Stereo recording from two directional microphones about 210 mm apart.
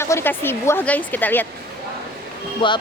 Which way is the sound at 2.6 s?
25° left (ahead or behind).